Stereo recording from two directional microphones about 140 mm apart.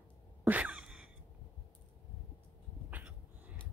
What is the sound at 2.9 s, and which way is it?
Dog, 10° right (ahead or behind).